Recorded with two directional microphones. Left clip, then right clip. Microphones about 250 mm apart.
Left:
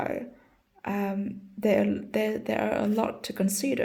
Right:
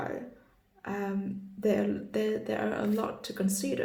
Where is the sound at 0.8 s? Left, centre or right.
Left.